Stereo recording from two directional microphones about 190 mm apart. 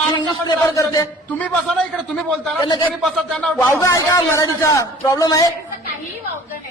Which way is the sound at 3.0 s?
Centre (ahead or behind).